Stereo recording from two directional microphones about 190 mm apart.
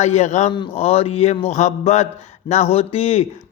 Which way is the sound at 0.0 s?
35° left (ahead or behind).